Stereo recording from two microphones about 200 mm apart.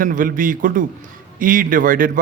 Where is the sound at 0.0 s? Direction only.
45° right (ahead or behind).